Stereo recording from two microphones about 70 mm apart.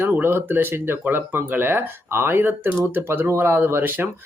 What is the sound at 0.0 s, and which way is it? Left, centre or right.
Speech, right.